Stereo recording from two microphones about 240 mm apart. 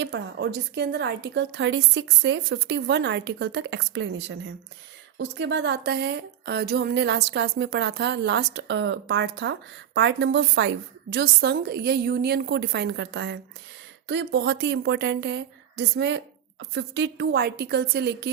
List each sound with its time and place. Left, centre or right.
0.0 s speech: right